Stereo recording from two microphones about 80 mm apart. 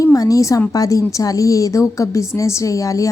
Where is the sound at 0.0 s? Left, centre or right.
Left.